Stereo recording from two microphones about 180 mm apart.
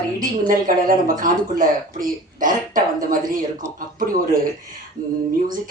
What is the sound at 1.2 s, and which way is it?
Speech, 50° right (ahead or behind).